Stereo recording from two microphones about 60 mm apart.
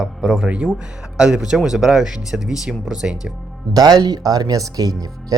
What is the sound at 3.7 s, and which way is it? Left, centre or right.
Speech, right.